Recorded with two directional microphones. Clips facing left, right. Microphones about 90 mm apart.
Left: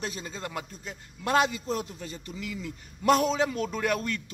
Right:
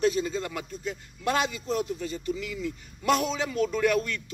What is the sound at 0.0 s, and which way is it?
A man's voice, 30° left (ahead or behind).